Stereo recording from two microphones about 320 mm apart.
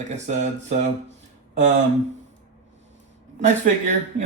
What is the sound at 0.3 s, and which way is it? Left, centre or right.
Speech, right.